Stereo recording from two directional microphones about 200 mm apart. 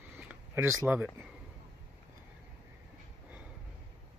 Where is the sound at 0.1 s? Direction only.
10° right (ahead or behind).